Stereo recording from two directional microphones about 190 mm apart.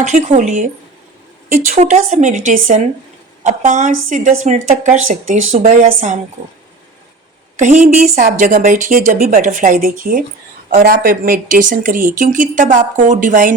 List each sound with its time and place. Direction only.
0.0 s speech: 35° right (ahead or behind)
1.7 s speech: 35° right (ahead or behind)
7.6 s speech: 40° right (ahead or behind)